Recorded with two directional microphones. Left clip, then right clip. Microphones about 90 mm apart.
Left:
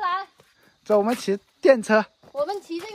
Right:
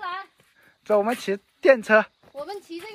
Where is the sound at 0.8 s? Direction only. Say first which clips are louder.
Left 1 dB; 15° left (ahead or behind).